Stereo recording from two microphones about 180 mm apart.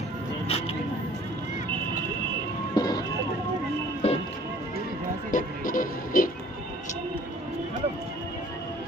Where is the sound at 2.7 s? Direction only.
20° left (ahead or behind).